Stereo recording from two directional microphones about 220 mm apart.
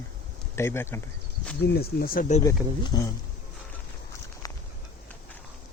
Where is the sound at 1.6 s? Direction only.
45° left (ahead or behind).